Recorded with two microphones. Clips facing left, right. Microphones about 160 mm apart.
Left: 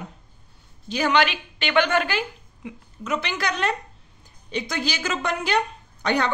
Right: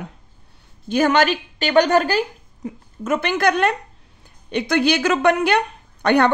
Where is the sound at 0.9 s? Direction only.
50° right (ahead or behind).